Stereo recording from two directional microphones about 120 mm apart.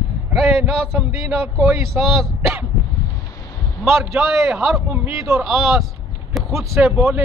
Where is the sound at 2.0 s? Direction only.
5° right (ahead or behind).